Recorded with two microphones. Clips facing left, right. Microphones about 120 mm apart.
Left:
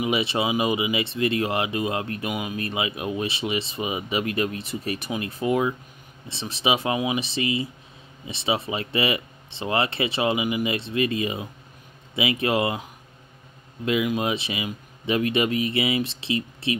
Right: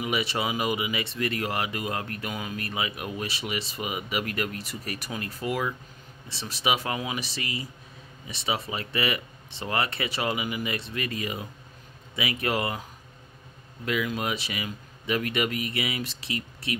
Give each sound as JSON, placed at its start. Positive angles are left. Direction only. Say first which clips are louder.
{"t": 0.0, "sound": "speech", "louder": "left 4 dB", "side_deg": 25}
{"t": 13.8, "sound": "speech", "louder": "left 5 dB", "side_deg": 20}